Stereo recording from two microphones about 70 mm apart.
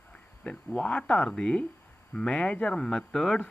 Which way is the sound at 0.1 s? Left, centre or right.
Centre.